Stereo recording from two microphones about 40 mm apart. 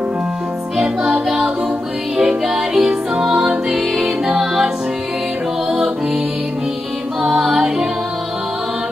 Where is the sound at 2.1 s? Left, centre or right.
Centre.